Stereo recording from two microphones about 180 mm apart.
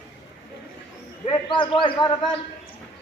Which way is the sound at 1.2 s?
30° left (ahead or behind).